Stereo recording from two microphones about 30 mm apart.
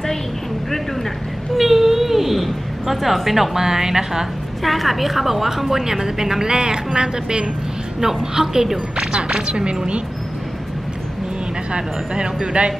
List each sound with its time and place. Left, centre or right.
1.6 s baby cry: centre
2.3 s a woman's voice: centre
4.6 s a woman's voice: centre; by 8.6 s right
9.3 s speech: right
11.7 s speech: right